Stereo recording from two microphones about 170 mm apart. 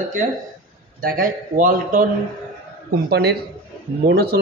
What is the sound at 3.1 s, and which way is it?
A man's voice, 70° right (ahead or behind).